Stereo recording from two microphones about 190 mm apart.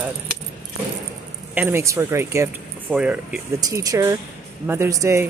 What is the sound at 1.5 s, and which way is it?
Speech, 10° right (ahead or behind).